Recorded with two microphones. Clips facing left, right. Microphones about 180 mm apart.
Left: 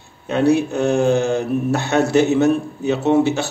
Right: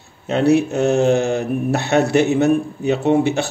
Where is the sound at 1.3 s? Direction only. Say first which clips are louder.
Even; 65° right (ahead or behind).